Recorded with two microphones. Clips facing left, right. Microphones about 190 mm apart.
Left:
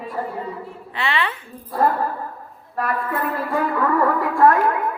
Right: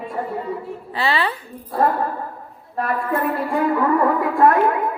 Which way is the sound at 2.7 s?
25° right (ahead or behind).